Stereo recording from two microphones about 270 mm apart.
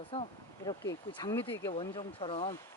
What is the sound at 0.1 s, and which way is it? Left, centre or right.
Speech, centre.